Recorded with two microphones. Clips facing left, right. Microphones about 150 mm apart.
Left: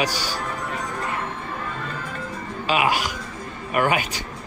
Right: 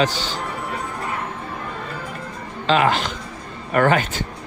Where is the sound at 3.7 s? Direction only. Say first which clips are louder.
Right 4 dB; 45° right (ahead or behind).